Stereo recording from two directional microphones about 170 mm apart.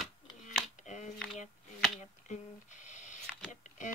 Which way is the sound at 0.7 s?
45° left (ahead or behind).